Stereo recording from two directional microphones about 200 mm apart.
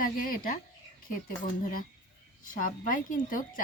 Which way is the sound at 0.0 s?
45° left (ahead or behind).